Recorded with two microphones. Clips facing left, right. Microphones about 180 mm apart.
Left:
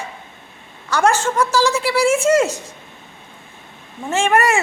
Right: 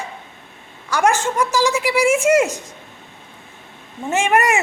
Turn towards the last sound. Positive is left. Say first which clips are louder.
# left 1 dB
turn(degrees=-15)  # may be behind; listen again after turning